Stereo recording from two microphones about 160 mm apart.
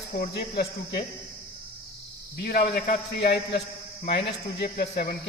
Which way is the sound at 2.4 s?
85° left.